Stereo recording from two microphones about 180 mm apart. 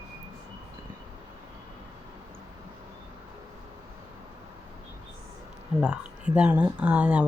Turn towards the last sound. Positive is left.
turn(degrees=-10)  # may be behind; listen again after turning